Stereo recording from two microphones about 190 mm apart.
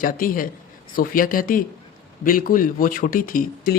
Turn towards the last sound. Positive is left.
turn(degrees=45)  # may be behind; listen again after turning